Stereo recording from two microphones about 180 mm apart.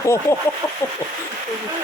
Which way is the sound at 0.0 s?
15° left (ahead or behind).